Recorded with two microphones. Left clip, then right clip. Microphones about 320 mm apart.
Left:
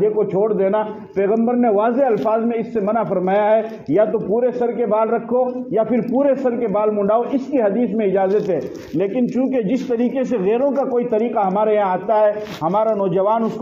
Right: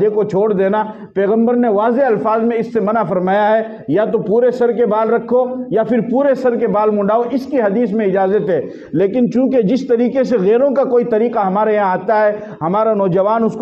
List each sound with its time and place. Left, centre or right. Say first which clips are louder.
0.0 s a man's voice: right 3 dB; right